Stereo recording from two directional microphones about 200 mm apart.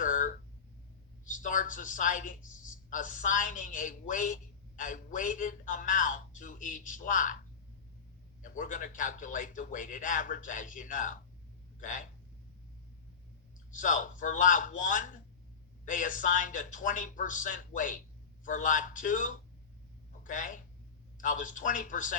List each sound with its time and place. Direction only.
0.0 s a sound: 40° left (ahead or behind)
1.2 s a woman's voice: 40° left (ahead or behind)
8.4 s a man's voice: 40° left (ahead or behind)
13.7 s a man's voice: 40° left (ahead or behind)